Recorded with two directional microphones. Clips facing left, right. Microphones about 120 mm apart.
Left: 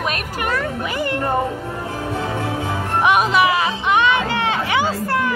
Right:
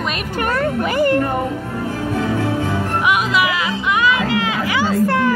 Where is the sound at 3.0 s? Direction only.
30° left (ahead or behind).